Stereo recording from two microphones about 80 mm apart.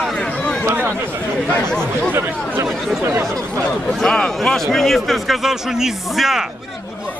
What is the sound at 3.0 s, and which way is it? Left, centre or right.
Speech, right.